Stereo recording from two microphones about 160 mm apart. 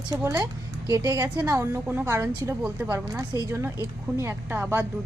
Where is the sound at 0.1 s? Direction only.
20° right (ahead or behind).